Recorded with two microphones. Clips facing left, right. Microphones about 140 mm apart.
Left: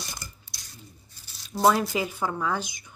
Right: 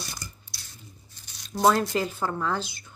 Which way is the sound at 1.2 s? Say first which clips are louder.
Even; 5° left (ahead or behind).